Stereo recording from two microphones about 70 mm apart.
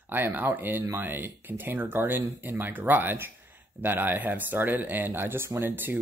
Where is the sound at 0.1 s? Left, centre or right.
Right.